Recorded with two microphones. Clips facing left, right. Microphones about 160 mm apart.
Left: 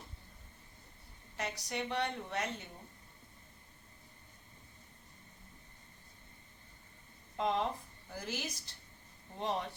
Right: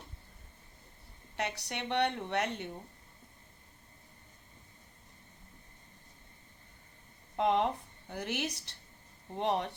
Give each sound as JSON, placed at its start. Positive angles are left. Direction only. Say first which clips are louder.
{"t": 1.4, "sound": "a woman's voice", "louder": "right 2 dB", "side_deg": -70}
{"t": 7.3, "sound": "a woman's voice", "louder": "right 5 dB", "side_deg": -65}